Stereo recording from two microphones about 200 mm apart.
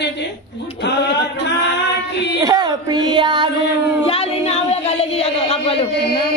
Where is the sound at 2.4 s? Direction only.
20° right (ahead or behind).